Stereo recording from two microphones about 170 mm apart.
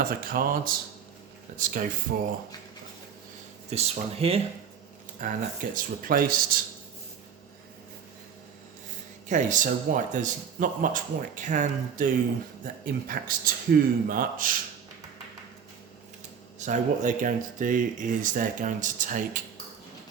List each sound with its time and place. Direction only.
0.0 s a man's voice: 60° right (ahead or behind)
2.1 s speech: 65° right (ahead or behind)
3.7 s speech: 40° right (ahead or behind)
5.7 s a man's voice: 55° right (ahead or behind)
9.3 s a man's voice: 50° right (ahead or behind)
16.6 s speech: 45° right (ahead or behind)